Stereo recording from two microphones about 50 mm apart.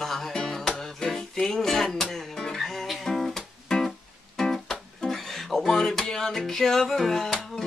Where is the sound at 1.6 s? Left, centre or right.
Centre.